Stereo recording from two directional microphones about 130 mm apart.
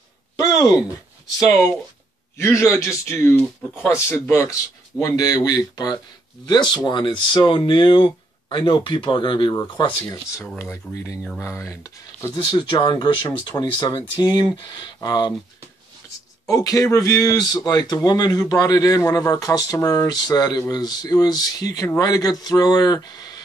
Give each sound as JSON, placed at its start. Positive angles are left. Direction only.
{"t": 0.4, "sound": "a sound", "side_deg": 25}
{"t": 2.3, "sound": "speech", "side_deg": 20}
{"t": 10.6, "sound": "speech", "side_deg": 20}
{"t": 12.4, "sound": "speech", "side_deg": 35}
{"t": 16.4, "sound": "speech", "side_deg": 25}